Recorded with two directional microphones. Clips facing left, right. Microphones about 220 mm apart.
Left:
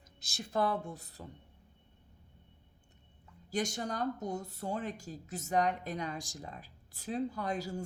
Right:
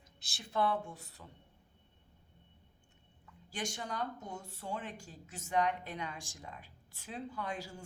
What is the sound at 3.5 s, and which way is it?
A woman's voice, 40° left (ahead or behind).